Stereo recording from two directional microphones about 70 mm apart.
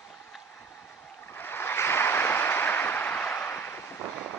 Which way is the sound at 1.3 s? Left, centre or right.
Left.